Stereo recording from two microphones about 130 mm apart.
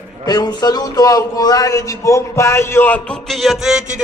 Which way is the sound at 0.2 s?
30° left (ahead or behind).